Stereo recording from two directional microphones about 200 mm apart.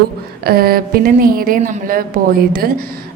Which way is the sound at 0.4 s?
50° right (ahead or behind).